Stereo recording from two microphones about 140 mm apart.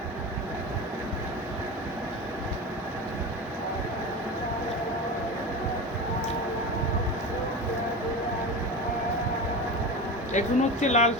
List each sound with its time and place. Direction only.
10.3 s speech: 55° left (ahead or behind)